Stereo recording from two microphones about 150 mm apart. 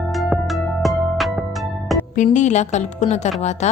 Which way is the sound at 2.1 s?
55° left (ahead or behind).